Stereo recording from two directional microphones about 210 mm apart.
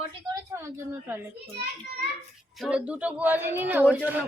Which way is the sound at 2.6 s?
5° right (ahead or behind).